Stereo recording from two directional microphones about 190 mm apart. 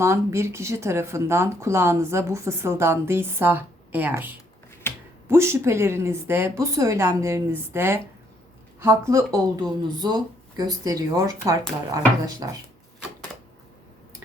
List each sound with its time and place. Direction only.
0.0 s speech: 15° right (ahead or behind)
4.9 s a sound: 15° left (ahead or behind)
5.3 s speech: 15° right (ahead or behind)